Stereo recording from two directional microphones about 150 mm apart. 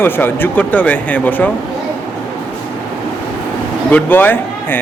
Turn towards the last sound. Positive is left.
turn(degrees=15)  # may be behind; listen again after turning